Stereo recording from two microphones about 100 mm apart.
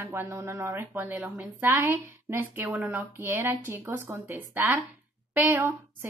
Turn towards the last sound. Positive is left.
turn(degrees=-20)  # may be behind; listen again after turning